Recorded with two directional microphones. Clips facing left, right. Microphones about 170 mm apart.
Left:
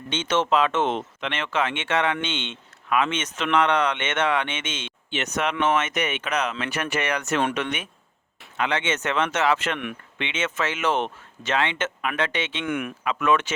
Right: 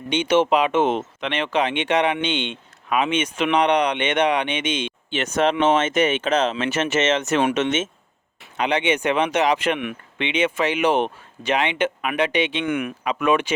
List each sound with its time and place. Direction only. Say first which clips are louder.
0.1 s speech: right 5 dB; 15° right (ahead or behind)
5.1 s speech: right 6 dB; 30° right (ahead or behind); by 12.6 s 15° right (ahead or behind)
12.6 s speech: right 3 dB; centre (ahead or behind)
13.1 s speech: right 2 dB; 15° right (ahead or behind)